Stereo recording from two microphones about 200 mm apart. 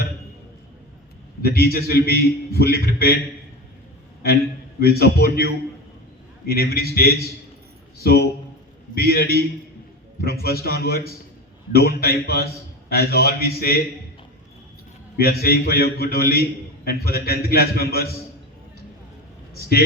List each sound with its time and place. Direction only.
1.4 s a man's voice: 50° left (ahead or behind)
4.8 s a man's voice: 50° left (ahead or behind)
15.2 s a man's voice: 50° left (ahead or behind)